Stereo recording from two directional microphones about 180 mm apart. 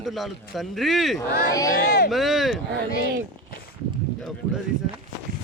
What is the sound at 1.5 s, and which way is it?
Speech, 20° left (ahead or behind).